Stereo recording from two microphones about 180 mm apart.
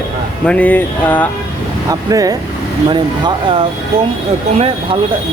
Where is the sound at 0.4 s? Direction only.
10° left (ahead or behind).